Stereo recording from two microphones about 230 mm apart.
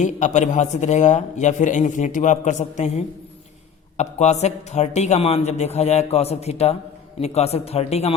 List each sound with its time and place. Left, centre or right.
0.0 s a man's voice: left